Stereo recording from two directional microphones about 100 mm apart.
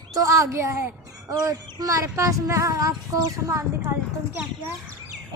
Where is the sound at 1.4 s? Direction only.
35° right (ahead or behind).